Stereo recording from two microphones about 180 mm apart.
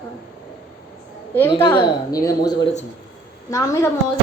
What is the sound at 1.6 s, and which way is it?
A woman's voice, 25° left (ahead or behind).